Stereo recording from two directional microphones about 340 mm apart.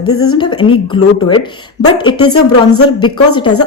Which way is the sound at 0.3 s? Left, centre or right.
Centre.